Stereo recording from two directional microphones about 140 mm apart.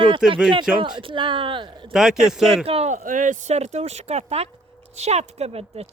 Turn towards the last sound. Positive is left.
turn(degrees=-45)  # may be behind; listen again after turning